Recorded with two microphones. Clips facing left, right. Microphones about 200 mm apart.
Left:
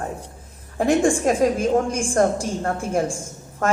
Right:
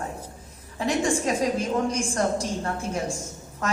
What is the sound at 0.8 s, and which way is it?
A woman's voice, 50° left (ahead or behind).